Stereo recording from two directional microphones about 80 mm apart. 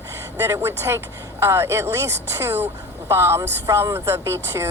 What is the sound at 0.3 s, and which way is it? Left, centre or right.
A woman's voice, right.